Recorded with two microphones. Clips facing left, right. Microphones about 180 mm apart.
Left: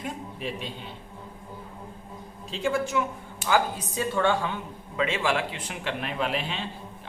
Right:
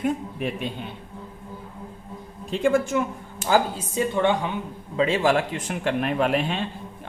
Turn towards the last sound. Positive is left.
turn(degrees=-50)  # may be behind; listen again after turning